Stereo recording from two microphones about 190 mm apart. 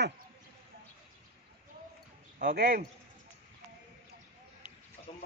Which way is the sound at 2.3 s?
50° right (ahead or behind).